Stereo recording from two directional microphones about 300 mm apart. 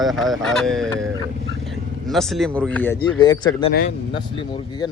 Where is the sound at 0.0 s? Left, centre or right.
Centre.